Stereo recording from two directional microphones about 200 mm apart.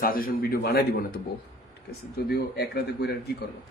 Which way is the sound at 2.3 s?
55° left (ahead or behind).